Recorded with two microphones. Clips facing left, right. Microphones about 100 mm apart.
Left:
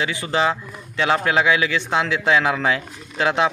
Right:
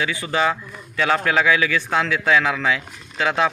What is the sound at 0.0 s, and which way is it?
A man's voice, 25° left (ahead or behind).